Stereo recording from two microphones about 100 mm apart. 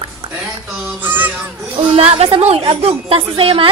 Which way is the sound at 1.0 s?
20° right (ahead or behind).